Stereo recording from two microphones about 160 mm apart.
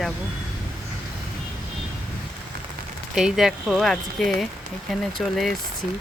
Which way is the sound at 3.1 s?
5° right (ahead or behind).